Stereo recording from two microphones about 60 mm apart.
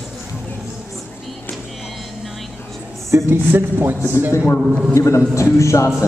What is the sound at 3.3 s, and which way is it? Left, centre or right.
Speech, right.